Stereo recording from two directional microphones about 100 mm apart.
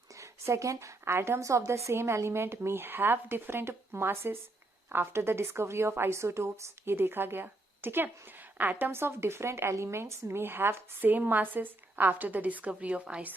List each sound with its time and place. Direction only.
0.2 s a woman's voice: 30° right (ahead or behind); by 13.3 s 10° right (ahead or behind)